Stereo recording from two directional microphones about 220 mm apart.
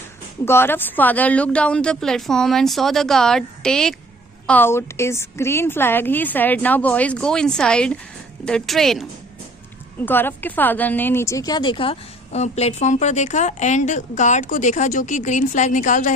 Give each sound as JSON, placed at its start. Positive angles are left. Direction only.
{"t": 0.4, "sound": "a woman's voice", "side_deg": 10}